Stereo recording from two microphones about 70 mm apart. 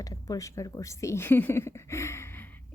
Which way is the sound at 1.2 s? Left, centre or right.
Left.